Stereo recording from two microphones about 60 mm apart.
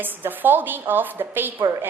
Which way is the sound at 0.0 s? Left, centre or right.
Right.